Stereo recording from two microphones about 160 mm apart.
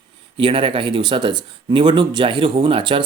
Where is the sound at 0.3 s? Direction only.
35° right (ahead or behind).